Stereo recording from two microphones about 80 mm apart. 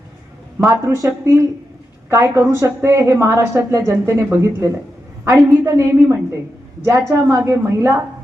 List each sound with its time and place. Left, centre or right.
0.6 s a woman's voice: right